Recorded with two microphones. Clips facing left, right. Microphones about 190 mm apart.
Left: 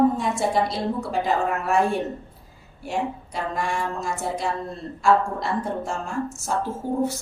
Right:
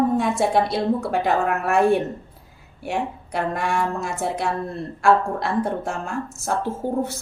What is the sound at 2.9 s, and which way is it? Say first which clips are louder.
A woman's voice: right 1 dB; 60° right (ahead or behind).